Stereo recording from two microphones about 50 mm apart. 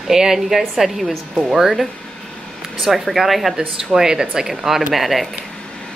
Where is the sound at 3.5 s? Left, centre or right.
Centre.